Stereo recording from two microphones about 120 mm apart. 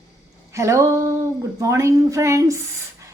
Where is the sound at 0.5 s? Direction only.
25° right (ahead or behind).